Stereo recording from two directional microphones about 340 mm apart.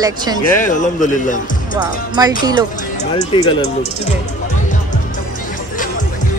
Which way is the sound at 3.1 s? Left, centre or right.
Centre.